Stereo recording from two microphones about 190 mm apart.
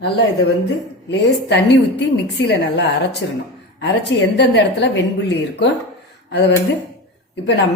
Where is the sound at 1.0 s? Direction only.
65° left (ahead or behind).